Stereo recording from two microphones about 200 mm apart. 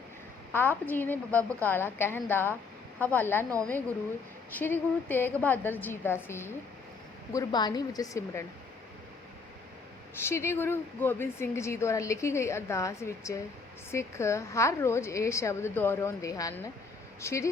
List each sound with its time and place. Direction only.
0.5 s a woman's voice: 10° left (ahead or behind)
4.5 s a woman's voice: 10° left (ahead or behind)
10.2 s a woman's voice: 10° left (ahead or behind)